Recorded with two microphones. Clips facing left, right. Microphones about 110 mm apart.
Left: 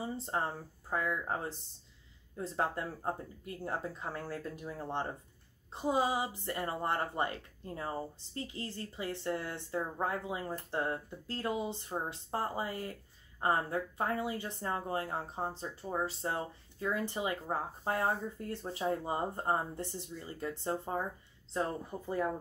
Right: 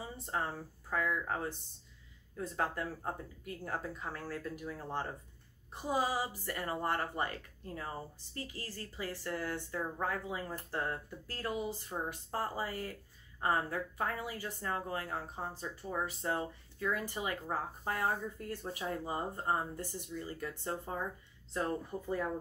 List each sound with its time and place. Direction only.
0.2 s speech: 30° left (ahead or behind)